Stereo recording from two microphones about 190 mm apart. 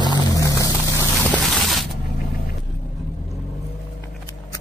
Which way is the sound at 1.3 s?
Centre (ahead or behind).